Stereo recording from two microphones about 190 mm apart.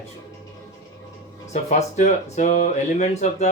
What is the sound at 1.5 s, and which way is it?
Speech, 35° left (ahead or behind).